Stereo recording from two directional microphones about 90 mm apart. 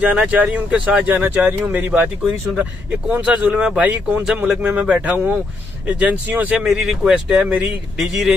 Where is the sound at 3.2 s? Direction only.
15° right (ahead or behind).